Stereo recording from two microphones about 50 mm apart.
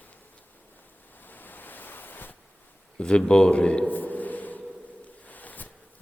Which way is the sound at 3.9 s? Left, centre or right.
Left.